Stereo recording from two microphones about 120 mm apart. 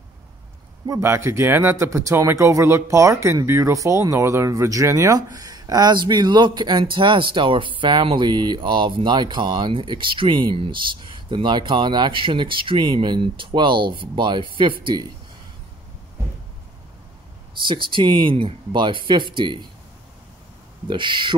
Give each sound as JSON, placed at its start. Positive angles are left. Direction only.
{"t": 0.8, "sound": "speech", "side_deg": -25}
{"t": 17.6, "sound": "speech", "side_deg": -45}
{"t": 20.9, "sound": "speech", "side_deg": -40}